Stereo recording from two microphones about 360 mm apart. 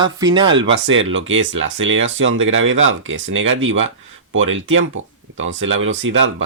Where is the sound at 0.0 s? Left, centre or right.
Centre.